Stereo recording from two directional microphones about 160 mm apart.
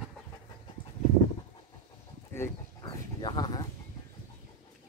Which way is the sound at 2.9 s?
25° left (ahead or behind).